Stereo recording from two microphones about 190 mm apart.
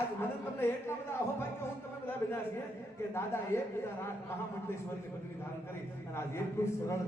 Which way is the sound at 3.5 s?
15° left (ahead or behind).